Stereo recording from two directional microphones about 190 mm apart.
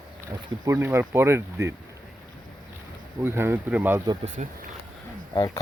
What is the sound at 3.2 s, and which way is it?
Speech, 10° right (ahead or behind).